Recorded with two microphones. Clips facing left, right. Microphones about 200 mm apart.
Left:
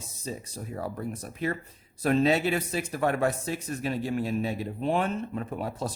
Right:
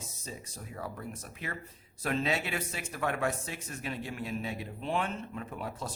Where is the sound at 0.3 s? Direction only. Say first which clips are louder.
Left 8 dB; 35° left (ahead or behind).